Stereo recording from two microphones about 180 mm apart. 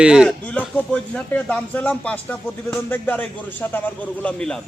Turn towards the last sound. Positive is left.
turn(degrees=5)  # may be behind; listen again after turning